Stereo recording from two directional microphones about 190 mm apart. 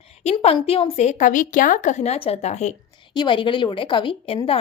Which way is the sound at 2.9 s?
25° left (ahead or behind).